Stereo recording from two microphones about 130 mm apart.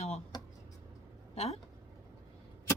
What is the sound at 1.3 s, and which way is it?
Speech, 55° left (ahead or behind).